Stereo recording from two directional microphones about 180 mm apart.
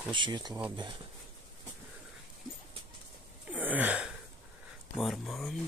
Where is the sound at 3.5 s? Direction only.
10° right (ahead or behind).